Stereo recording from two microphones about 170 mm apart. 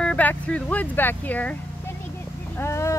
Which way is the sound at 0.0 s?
10° left (ahead or behind).